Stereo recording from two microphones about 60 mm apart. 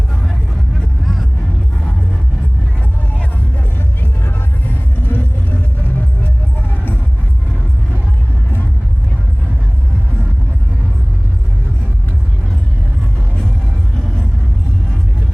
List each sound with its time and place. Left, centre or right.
3.8 s music: left